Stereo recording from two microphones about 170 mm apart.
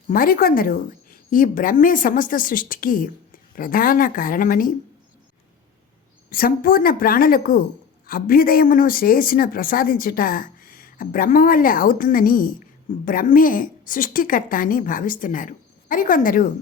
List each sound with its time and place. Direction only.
0.1 s a woman's voice: 60° left (ahead or behind)
6.3 s a woman's voice: 60° left (ahead or behind)